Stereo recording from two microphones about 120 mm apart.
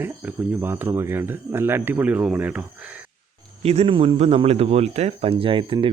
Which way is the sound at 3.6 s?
60° right (ahead or behind).